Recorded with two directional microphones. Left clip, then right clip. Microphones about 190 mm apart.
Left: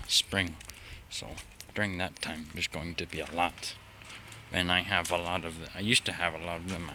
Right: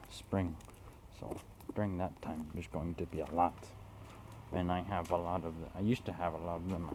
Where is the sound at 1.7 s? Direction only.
10° left (ahead or behind).